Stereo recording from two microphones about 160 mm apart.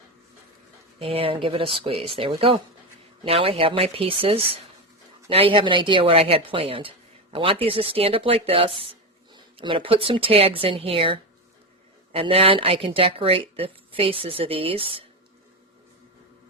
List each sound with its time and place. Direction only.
0.9 s speech: 35° right (ahead or behind)